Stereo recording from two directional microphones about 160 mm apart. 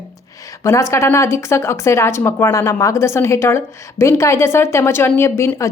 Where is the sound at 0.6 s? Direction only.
20° left (ahead or behind).